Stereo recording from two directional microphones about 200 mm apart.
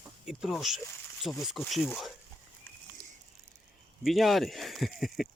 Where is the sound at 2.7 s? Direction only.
10° left (ahead or behind).